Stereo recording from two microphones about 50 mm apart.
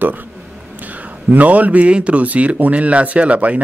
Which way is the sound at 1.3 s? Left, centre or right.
Right.